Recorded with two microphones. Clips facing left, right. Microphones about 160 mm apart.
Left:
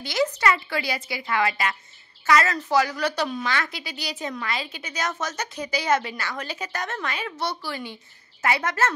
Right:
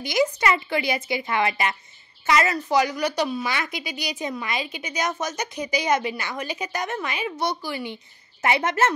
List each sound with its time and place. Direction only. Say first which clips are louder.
0.0 s a woman's voice: right 1 dB; 15° right (ahead or behind)